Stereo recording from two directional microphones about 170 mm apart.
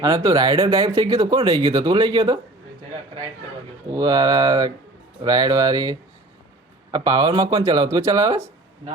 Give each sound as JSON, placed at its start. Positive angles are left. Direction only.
{"t": 0.0, "sound": "speech", "side_deg": -20}
{"t": 3.9, "sound": "speech", "side_deg": -25}